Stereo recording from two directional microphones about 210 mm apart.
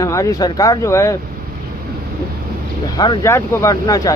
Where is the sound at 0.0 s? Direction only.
15° left (ahead or behind).